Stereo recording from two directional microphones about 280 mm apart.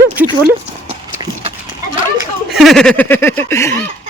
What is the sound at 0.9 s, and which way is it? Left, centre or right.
Horse, centre.